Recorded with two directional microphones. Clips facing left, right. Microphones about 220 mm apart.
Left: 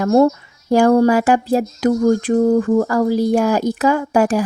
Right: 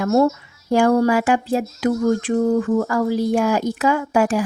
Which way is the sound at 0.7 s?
40° left (ahead or behind).